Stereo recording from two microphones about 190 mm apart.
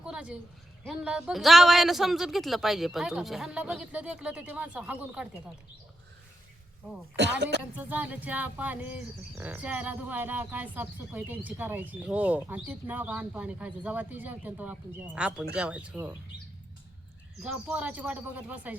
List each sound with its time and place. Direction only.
0.0 s a sound: 5° right (ahead or behind)
0.9 s speech: 5° right (ahead or behind)
7.2 s speech: 65° right (ahead or behind)
7.8 s speech: 10° right (ahead or behind)
17.4 s speech: 5° right (ahead or behind)